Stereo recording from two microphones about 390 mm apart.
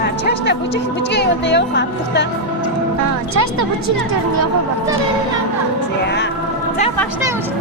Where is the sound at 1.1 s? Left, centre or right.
Left.